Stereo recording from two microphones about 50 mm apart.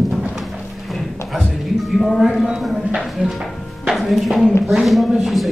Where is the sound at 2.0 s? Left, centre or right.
Centre.